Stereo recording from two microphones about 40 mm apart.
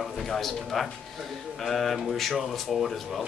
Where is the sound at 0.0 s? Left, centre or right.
Centre.